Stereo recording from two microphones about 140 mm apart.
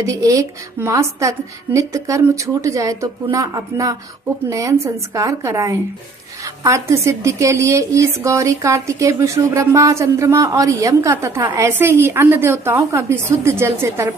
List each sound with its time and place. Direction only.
0.0 s a woman's voice: 25° right (ahead or behind)